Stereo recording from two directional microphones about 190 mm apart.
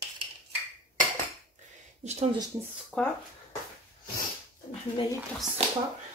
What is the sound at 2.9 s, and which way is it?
Speech, 5° left (ahead or behind).